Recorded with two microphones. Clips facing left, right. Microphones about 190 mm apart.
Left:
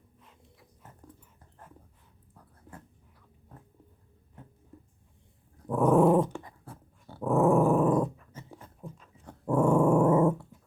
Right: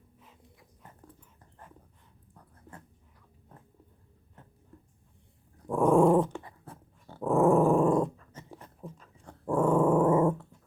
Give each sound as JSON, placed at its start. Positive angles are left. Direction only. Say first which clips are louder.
{"t": 2.3, "sound": "dog", "louder": "left 1 dB", "side_deg": 5}
{"t": 5.6, "sound": "dog", "louder": "even", "side_deg": 0}
{"t": 8.4, "sound": "dog", "louder": "right 2 dB", "side_deg": 0}